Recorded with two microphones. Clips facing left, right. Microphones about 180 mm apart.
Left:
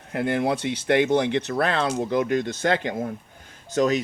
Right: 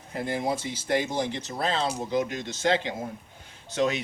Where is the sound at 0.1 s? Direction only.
65° left (ahead or behind).